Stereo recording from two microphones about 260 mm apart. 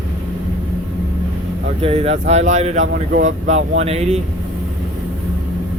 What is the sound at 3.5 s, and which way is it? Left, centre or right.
Speech, right.